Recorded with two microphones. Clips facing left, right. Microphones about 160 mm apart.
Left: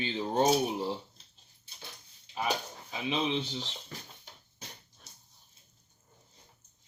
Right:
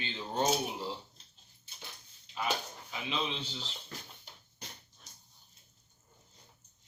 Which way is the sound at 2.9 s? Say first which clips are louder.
Left 6 dB; 20° left (ahead or behind).